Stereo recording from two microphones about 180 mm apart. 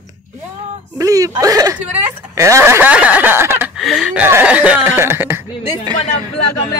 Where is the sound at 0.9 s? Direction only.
20° right (ahead or behind).